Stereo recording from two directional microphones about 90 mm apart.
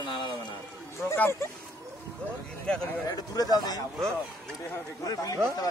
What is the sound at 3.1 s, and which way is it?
Speech, 45° left (ahead or behind).